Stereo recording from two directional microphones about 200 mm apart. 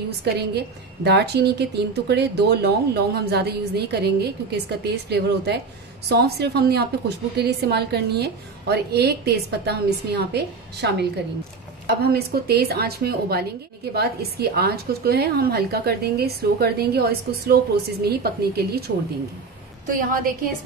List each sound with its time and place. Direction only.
0.2 s a woman's voice: 55° right (ahead or behind)
19.9 s a woman's voice: 45° right (ahead or behind)